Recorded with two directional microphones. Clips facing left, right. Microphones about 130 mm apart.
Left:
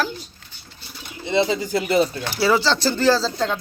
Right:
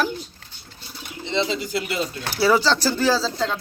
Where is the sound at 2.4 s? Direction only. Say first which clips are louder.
Even; 10° right (ahead or behind).